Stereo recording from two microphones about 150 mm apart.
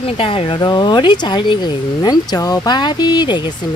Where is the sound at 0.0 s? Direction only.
40° left (ahead or behind).